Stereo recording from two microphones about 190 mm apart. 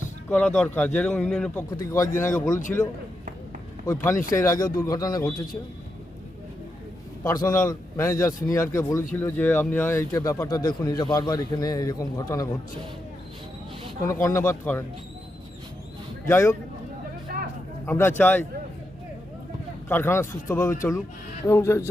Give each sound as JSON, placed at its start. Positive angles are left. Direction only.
{"t": 0.3, "sound": "speech", "side_deg": 5}
{"t": 1.7, "sound": "speech", "side_deg": 15}
{"t": 3.8, "sound": "speech", "side_deg": 15}
{"t": 7.3, "sound": "speech", "side_deg": 15}
{"t": 14.1, "sound": "speech", "side_deg": 15}
{"t": 16.3, "sound": "speech", "side_deg": 15}
{"t": 17.8, "sound": "speech", "side_deg": 10}
{"t": 19.9, "sound": "speech", "side_deg": 10}